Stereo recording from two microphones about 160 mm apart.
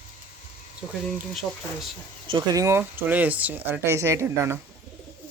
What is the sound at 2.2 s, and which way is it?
Speech, 25° right (ahead or behind).